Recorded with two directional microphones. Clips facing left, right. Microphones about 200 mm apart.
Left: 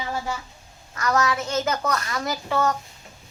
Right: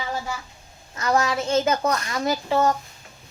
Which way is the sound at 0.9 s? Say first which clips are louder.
Right 1 dB; 25° right (ahead or behind).